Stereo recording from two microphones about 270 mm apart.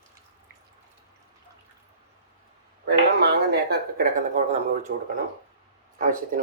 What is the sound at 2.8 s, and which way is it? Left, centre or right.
Speech, right.